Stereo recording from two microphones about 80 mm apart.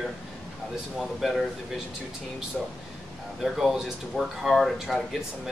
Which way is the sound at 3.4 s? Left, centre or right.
Centre.